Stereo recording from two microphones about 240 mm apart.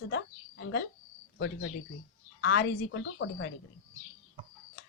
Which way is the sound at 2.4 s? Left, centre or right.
Left.